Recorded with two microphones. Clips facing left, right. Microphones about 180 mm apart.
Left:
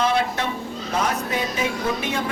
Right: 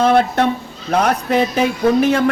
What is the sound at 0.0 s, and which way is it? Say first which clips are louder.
Speech: right 8 dB; 55° right (ahead or behind).